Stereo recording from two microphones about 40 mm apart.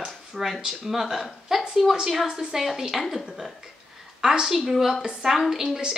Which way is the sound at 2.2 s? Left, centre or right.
Right.